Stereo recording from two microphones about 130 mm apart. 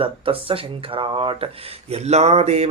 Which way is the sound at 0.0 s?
45° right (ahead or behind).